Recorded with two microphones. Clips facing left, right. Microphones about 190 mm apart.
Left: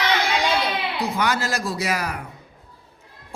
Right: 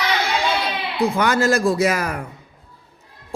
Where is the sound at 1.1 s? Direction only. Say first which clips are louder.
Right 7 dB; 50° right (ahead or behind).